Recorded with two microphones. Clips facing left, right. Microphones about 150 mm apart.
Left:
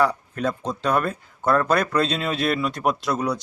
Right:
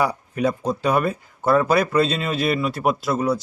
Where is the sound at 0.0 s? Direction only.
10° right (ahead or behind).